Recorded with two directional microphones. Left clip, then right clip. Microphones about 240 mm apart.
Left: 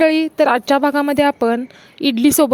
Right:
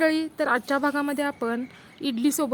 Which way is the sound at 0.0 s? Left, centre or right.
Left.